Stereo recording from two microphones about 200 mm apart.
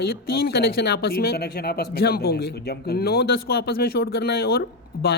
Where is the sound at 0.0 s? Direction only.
50° left (ahead or behind).